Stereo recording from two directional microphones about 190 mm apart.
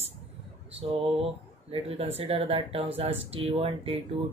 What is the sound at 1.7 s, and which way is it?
Speech, 30° right (ahead or behind).